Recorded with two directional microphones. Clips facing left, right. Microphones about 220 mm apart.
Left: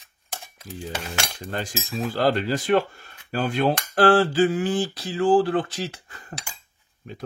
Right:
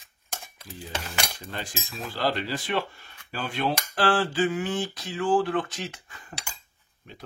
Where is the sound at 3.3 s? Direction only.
45° left (ahead or behind).